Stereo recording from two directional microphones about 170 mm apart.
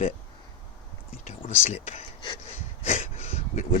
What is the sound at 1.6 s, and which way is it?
Speech, 40° left (ahead or behind).